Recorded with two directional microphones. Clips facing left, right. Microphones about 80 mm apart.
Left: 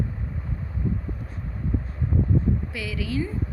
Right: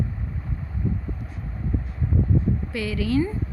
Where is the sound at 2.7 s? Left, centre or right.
Right.